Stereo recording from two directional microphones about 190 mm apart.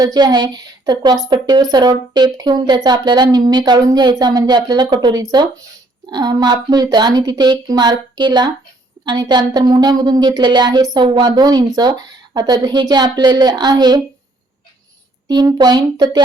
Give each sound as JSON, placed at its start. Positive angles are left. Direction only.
{"t": 0.0, "sound": "a woman's voice", "side_deg": -20}
{"t": 15.3, "sound": "a woman's voice", "side_deg": -20}